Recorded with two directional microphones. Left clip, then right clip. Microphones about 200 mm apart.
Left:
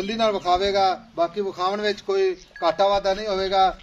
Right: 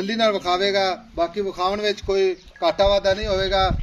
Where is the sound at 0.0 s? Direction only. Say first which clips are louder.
Right 2 dB; 50° right (ahead or behind).